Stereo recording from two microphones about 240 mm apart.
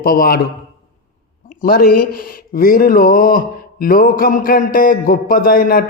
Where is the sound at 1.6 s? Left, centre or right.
Left.